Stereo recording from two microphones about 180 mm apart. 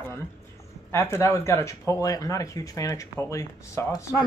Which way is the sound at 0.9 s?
15° left (ahead or behind).